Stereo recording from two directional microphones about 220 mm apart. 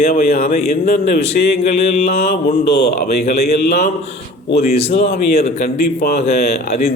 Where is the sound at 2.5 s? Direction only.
40° left (ahead or behind).